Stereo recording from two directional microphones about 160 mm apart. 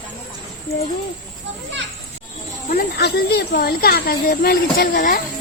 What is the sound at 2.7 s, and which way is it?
Speech, 85° left.